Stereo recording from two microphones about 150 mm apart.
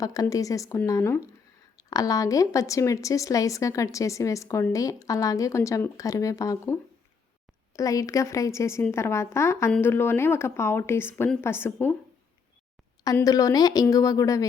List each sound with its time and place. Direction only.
0.0 s a woman's voice: 25° left (ahead or behind)
7.8 s a woman's voice: 20° left (ahead or behind)
13.1 s a woman's voice: 20° left (ahead or behind)